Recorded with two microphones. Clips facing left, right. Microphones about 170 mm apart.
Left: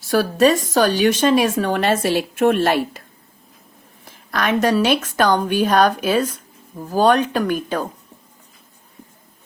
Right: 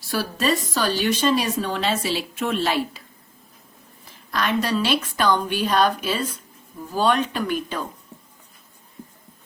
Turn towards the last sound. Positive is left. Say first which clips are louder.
# left 5 dB
turn(degrees=50)  # may be behind; listen again after turning